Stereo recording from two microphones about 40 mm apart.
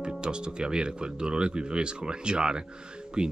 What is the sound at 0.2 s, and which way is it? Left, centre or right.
Speech, right.